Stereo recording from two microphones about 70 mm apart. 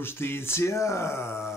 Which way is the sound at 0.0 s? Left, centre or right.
Left.